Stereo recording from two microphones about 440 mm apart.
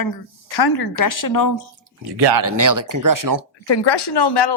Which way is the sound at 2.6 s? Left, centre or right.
Right.